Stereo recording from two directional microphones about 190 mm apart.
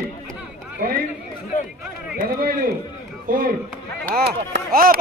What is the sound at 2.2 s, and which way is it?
Chopping, 50° right (ahead or behind).